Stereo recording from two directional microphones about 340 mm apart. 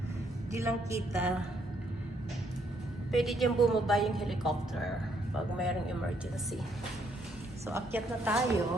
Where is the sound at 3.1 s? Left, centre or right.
Centre.